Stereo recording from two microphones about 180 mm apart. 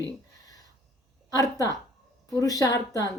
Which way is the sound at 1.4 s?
20° left (ahead or behind).